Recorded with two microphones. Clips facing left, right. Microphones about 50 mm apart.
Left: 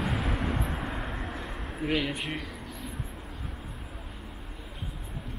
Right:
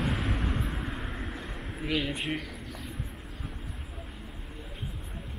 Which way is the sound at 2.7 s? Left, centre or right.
Centre.